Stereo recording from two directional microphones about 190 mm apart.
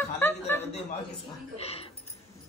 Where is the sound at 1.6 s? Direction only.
30° left (ahead or behind).